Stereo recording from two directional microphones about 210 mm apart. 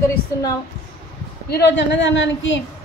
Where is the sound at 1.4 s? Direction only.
50° left (ahead or behind).